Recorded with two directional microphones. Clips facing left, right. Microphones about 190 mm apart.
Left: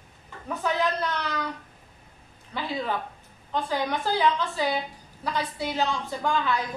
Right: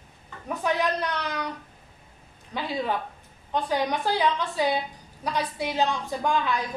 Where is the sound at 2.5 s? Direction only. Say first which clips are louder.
Right 1 dB; 15° right (ahead or behind).